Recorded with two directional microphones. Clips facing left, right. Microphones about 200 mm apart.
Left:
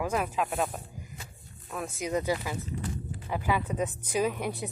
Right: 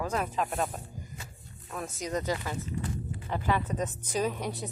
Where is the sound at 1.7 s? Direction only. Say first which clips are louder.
Left 2 dB; 5° left (ahead or behind).